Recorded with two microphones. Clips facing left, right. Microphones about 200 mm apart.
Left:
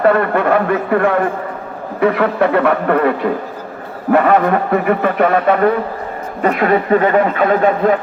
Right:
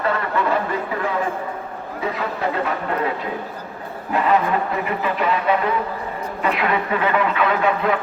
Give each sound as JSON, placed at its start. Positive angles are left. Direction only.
{"t": 0.0, "sound": "a man's voice", "side_deg": 60}